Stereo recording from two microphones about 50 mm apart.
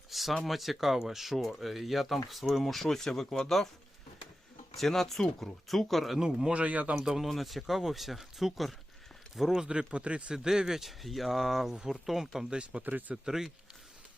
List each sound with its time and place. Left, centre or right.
0.1 s a sound: centre
0.4 s speech: centre
4.8 s speech: centre
6.1 s a man's voice: centre
6.5 s speech: right
6.9 s a man's voice: centre
10.3 s speech: centre
11.7 s a man's voice: centre
12.0 s speech: centre
12.5 s speech: right
12.8 s speech: right
13.2 s a man's voice: centre